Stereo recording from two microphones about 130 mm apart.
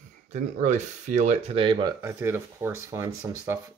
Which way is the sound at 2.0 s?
20° right (ahead or behind).